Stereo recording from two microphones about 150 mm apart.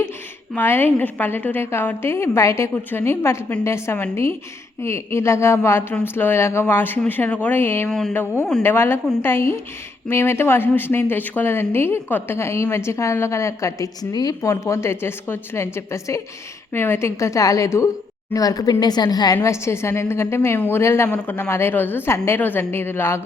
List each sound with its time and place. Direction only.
0.5 s a woman's voice: 15° left (ahead or behind)
7.9 s a sound: 5° left (ahead or behind)
8.1 s a woman's voice: 15° left (ahead or behind)